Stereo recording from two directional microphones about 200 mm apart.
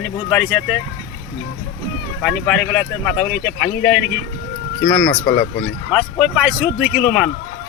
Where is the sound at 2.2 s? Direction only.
5° left (ahead or behind).